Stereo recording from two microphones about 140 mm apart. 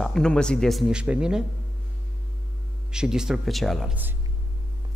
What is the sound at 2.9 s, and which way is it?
A man's voice, 5° right (ahead or behind).